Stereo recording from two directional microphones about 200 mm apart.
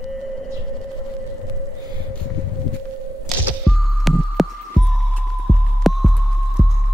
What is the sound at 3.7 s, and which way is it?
Throbbing, centre (ahead or behind).